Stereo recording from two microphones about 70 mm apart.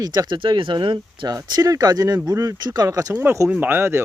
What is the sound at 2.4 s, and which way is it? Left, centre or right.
Speech, right.